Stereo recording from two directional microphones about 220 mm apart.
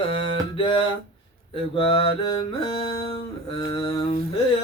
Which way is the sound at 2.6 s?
25° left (ahead or behind).